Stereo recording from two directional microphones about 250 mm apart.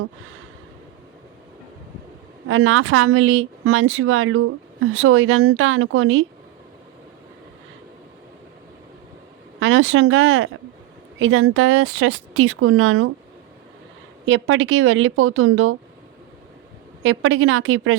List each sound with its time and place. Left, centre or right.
2.5 s speech: right
9.6 s a woman's voice: right
14.3 s a woman's voice: right
17.0 s speech: right